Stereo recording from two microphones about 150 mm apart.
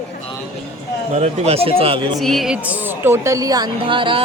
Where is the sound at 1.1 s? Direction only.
45° right (ahead or behind).